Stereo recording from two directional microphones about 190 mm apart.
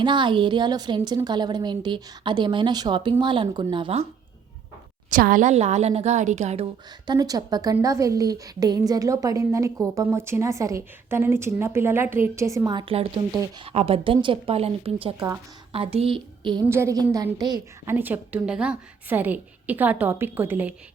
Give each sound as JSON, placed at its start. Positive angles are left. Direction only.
{"t": 0.0, "sound": "a woman's voice", "side_deg": -25}
{"t": 5.1, "sound": "a woman's voice", "side_deg": -45}
{"t": 7.1, "sound": "a woman's voice", "side_deg": -20}
{"t": 16.6, "sound": "a woman's voice", "side_deg": -15}
{"t": 17.9, "sound": "a woman's voice", "side_deg": -10}